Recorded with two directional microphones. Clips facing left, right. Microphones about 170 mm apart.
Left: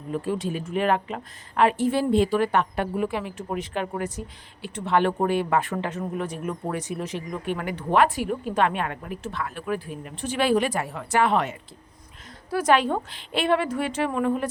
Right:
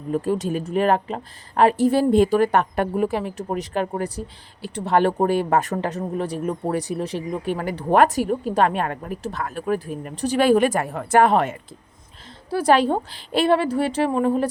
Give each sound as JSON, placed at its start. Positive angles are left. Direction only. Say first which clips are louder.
{"t": 0.1, "sound": "speech", "louder": "right 5 dB", "side_deg": -45}
{"t": 12.5, "sound": "speech", "louder": "right 3 dB", "side_deg": -30}